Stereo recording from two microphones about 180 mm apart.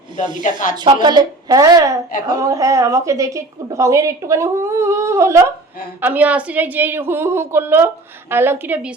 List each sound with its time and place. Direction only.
0.4 s speech: 45° left (ahead or behind)
1.0 s a woman's voice: 20° right (ahead or behind)